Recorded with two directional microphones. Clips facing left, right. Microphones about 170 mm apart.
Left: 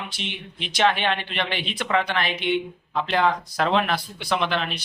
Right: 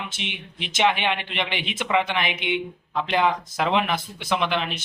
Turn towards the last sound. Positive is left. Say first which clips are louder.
# even
turn(degrees=-15)  # may be behind; listen again after turning